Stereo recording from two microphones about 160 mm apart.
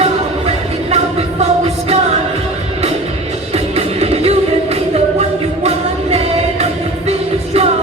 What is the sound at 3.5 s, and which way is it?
Music, 40° right (ahead or behind).